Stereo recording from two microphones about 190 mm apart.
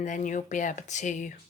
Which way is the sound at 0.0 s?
40° left (ahead or behind).